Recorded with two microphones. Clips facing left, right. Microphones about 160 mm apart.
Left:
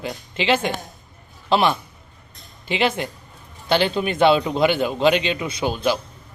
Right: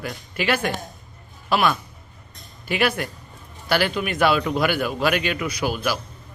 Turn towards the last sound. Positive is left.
turn(degrees=25)  # may be behind; listen again after turning